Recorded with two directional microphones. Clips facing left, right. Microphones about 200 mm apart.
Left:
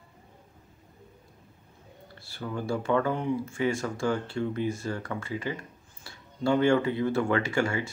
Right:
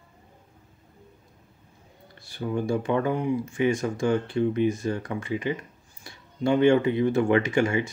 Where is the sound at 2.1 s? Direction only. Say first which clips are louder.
Left 1 dB; 15° right (ahead or behind).